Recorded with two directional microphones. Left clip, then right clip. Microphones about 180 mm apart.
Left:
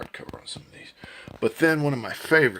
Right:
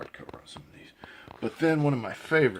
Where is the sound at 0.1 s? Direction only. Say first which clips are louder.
Left 6 dB; 35° left (ahead or behind).